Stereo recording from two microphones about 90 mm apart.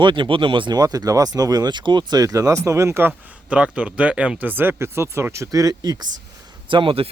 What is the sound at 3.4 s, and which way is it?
Speech, 10° right (ahead or behind).